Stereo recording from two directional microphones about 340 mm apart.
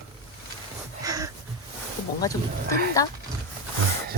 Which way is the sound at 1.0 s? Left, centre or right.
Centre.